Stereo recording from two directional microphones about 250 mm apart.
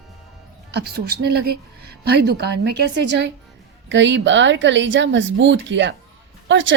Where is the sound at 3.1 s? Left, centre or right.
Right.